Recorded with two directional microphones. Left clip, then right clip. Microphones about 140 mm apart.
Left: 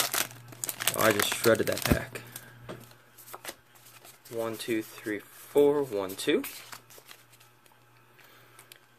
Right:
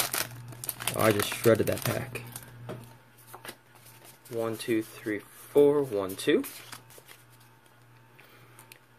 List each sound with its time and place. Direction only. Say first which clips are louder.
0.1 s crumpling: left 2 dB; 30° left (ahead or behind)
0.9 s speech: even; 20° left (ahead or behind); by 2.2 s 5° left (ahead or behind)
4.3 s speech: right 2 dB; centre (ahead or behind)